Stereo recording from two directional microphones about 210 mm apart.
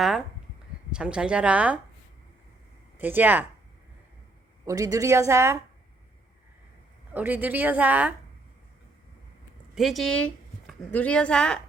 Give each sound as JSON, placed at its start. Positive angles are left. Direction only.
{"t": 0.0, "sound": "speech", "side_deg": 0}
{"t": 3.0, "sound": "speech", "side_deg": -10}
{"t": 4.6, "sound": "speech", "side_deg": -15}
{"t": 7.1, "sound": "speech", "side_deg": -10}
{"t": 9.7, "sound": "a woman's voice", "side_deg": 0}